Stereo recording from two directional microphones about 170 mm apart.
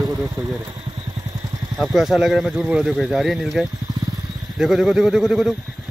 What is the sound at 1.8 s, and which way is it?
Speech, centre (ahead or behind).